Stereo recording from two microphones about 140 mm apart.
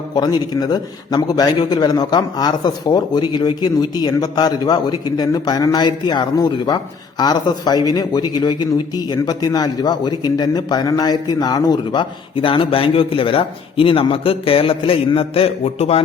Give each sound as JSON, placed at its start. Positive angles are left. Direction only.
{"t": 0.1, "sound": "a man's voice", "side_deg": 30}